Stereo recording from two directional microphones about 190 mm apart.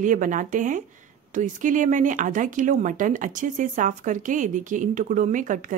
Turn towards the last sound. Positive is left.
turn(degrees=-45)  # may be behind; listen again after turning